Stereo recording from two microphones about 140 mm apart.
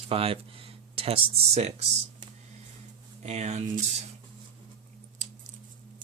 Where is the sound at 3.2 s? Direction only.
50° right (ahead or behind).